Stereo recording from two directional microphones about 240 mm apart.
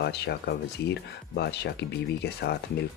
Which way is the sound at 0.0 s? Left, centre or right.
Left.